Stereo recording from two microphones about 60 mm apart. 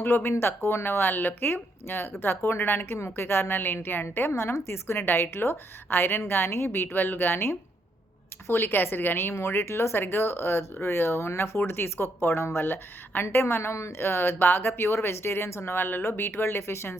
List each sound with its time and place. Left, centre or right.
0.0 s speech: left
4.3 s a woman's voice: left
14.0 s speech: left